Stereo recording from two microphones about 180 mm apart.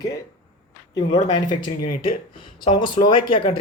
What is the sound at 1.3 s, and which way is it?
A man's voice, 25° left (ahead or behind).